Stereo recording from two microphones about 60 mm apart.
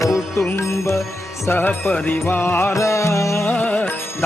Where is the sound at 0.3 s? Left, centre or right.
Left.